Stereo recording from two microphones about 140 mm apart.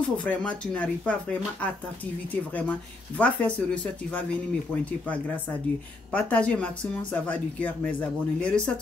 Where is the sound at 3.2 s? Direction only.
10° left (ahead or behind).